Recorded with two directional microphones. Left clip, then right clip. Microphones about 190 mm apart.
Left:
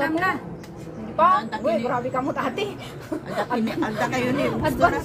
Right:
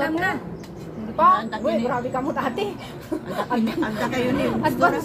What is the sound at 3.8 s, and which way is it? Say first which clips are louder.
Speech: even; 50° left (ahead or behind).